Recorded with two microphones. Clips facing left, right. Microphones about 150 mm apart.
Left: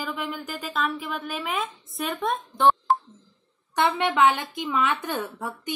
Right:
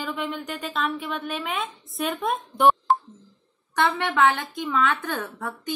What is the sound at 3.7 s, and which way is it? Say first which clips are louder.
A woman's voice: even; 20° left (ahead or behind).